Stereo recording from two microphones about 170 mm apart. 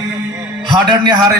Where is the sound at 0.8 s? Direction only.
25° right (ahead or behind).